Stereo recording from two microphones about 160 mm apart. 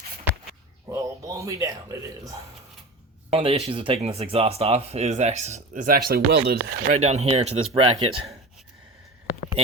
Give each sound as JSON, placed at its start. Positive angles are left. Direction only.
{"t": 0.9, "sound": "speech", "side_deg": -20}
{"t": 3.2, "sound": "speech", "side_deg": -40}
{"t": 6.1, "sound": "speech", "side_deg": -75}
{"t": 6.9, "sound": "speech", "side_deg": -40}